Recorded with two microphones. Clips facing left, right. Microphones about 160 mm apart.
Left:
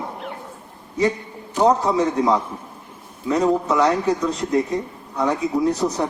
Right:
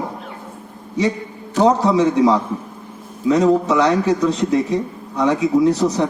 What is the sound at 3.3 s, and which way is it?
A man's voice, 85° right.